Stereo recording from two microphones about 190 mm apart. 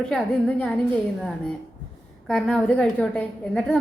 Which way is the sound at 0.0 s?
5° left (ahead or behind).